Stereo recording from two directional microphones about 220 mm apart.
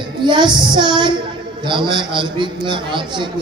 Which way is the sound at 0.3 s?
20° right (ahead or behind).